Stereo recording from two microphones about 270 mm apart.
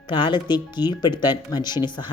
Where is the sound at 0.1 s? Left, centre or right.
Centre.